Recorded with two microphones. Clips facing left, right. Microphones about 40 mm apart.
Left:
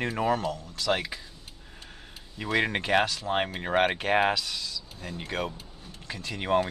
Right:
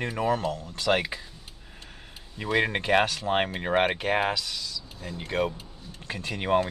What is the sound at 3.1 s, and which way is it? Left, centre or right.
Speech, right.